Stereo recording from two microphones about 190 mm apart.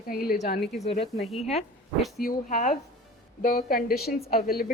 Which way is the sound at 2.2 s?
45° left (ahead or behind).